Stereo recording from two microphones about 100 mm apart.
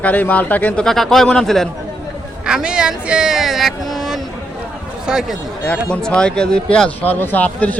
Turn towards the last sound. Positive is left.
turn(degrees=15)  # may be behind; listen again after turning